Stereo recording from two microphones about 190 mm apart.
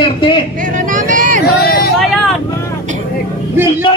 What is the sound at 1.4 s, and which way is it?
Vehicle, 55° left (ahead or behind).